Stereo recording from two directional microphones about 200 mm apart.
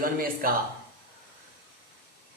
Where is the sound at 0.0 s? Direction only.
45° right (ahead or behind).